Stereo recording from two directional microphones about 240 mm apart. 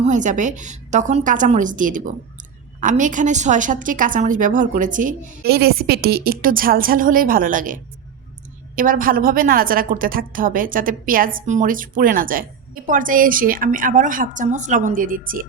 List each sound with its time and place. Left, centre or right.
0.0 s a woman's voice: right